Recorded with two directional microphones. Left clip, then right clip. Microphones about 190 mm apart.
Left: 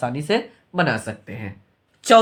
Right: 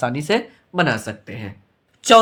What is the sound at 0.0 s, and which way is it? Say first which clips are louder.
Speech: right 2 dB; 25° right (ahead or behind).